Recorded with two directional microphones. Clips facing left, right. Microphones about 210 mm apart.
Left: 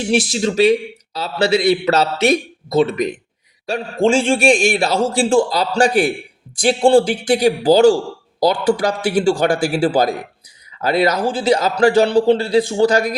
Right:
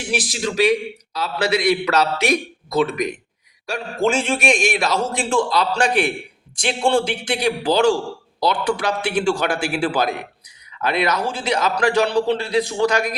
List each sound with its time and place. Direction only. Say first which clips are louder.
0.1 s a man's voice: left 6 dB; 25° left (ahead or behind)